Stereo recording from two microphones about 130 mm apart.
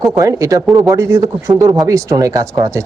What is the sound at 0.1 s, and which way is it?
A woman's voice, 25° right (ahead or behind).